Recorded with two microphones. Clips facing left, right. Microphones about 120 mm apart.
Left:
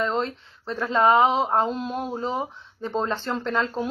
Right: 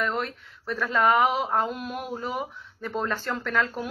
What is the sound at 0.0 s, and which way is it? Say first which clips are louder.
Speech: left 3 dB; 25° left (ahead or behind).